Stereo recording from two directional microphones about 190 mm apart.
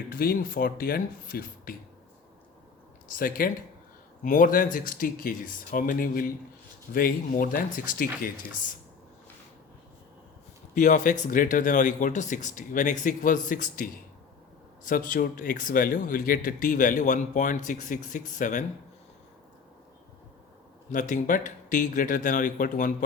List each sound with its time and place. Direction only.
0.1 s speech: 50° left (ahead or behind)
3.2 s speech: 50° left (ahead or behind)
10.8 s speech: 45° left (ahead or behind)
20.9 s speech: 40° left (ahead or behind)